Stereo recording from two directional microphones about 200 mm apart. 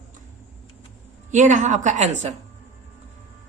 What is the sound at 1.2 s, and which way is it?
A woman's voice, 40° right (ahead or behind).